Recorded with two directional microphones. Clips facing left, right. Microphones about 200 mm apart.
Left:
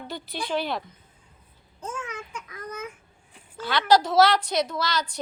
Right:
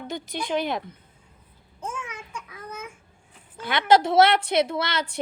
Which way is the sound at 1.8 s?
10° right (ahead or behind).